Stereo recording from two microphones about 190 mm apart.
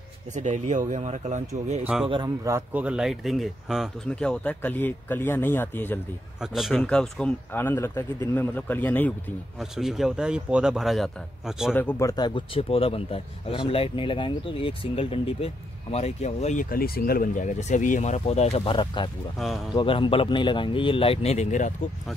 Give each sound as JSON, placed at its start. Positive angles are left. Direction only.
{"t": 0.3, "sound": "speech", "side_deg": -40}
{"t": 2.0, "sound": "speech", "side_deg": -20}
{"t": 6.4, "sound": "speech", "side_deg": 0}
{"t": 9.6, "sound": "speech", "side_deg": 0}
{"t": 11.7, "sound": "speech", "side_deg": 10}
{"t": 16.7, "sound": "speech", "side_deg": 50}
{"t": 19.3, "sound": "speech", "side_deg": 0}
{"t": 19.7, "sound": "speech", "side_deg": 25}